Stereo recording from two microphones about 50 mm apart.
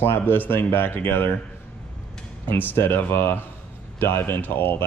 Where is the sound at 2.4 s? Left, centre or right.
Left.